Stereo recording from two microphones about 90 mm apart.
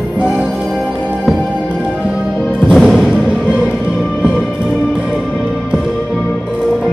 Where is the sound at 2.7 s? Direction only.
Centre (ahead or behind).